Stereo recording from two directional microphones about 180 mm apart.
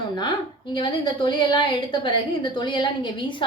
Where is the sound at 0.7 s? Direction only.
25° left (ahead or behind).